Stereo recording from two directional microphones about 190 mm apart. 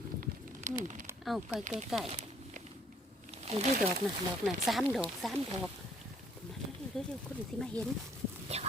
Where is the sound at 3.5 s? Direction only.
35° right (ahead or behind).